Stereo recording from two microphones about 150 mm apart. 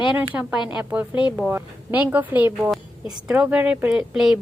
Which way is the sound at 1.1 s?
30° left (ahead or behind).